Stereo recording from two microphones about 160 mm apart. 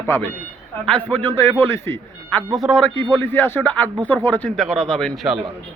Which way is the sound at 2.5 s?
Centre (ahead or behind).